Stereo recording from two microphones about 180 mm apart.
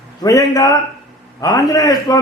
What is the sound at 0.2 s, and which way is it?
A man's voice, 20° left (ahead or behind).